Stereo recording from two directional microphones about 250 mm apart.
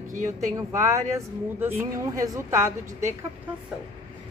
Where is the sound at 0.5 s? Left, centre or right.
Centre.